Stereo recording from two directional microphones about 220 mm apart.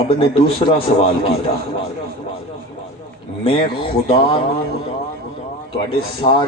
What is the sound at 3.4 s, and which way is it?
A man's voice, 25° left (ahead or behind).